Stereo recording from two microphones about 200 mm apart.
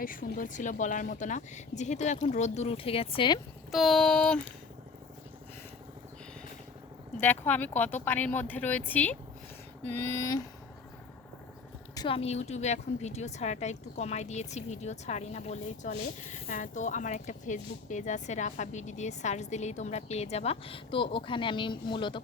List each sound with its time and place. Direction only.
0.0 s a woman's voice: 45° left (ahead or behind); by 3.4 s 25° left (ahead or behind)
3.7 s child singing: centre (ahead or behind)
7.2 s speech: 10° left (ahead or behind)
11.9 s a woman's voice: 25° left (ahead or behind)